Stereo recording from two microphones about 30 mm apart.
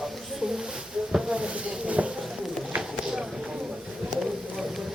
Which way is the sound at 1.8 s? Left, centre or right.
Right.